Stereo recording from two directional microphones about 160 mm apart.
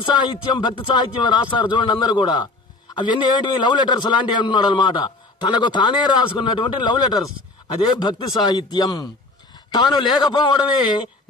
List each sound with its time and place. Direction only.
0.0 s speech: 30° left (ahead or behind)